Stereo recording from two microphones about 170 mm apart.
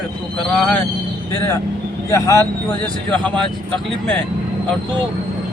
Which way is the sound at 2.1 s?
15° left (ahead or behind).